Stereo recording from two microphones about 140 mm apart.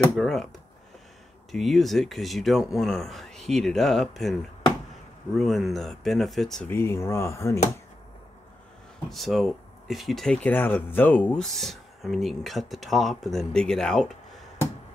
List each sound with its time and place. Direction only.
0.1 s speech: centre (ahead or behind)
1.5 s speech: centre (ahead or behind)
6.7 s speech: 15° left (ahead or behind)
9.1 s speech: centre (ahead or behind)
11.4 s speech: centre (ahead or behind)